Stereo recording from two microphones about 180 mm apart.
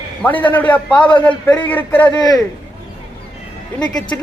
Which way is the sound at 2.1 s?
20° left (ahead or behind).